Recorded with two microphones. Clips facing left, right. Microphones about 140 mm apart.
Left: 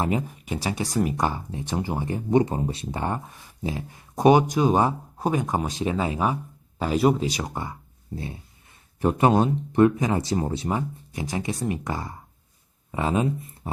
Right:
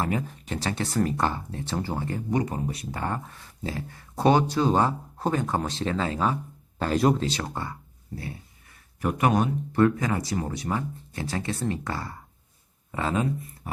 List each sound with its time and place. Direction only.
0.0 s speech: 20° left (ahead or behind)